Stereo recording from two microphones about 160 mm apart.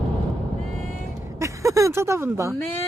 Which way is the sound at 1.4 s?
20° right (ahead or behind).